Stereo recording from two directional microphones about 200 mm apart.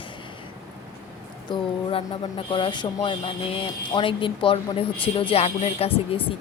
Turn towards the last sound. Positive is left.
turn(degrees=30)  # may be behind; listen again after turning